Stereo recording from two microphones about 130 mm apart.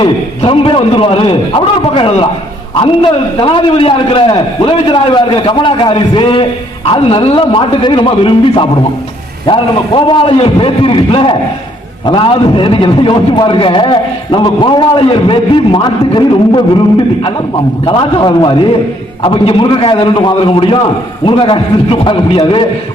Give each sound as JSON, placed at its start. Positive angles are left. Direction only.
{"t": 0.0, "sound": "a man's voice", "side_deg": 40}
{"t": 17.8, "sound": "a man's voice", "side_deg": 35}